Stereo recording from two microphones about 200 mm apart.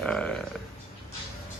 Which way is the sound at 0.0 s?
5° left (ahead or behind).